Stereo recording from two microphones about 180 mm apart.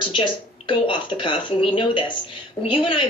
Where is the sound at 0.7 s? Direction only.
30° left (ahead or behind).